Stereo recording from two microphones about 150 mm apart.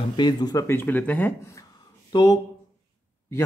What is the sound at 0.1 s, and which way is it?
Speech, 30° left (ahead or behind).